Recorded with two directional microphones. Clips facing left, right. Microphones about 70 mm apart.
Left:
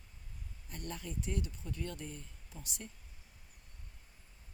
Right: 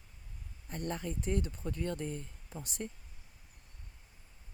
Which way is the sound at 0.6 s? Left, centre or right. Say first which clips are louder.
Right 6 dB; right.